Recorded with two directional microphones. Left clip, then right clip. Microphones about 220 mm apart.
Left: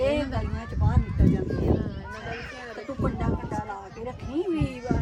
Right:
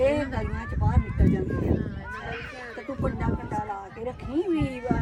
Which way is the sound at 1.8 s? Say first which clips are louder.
Even; 40° left (ahead or behind).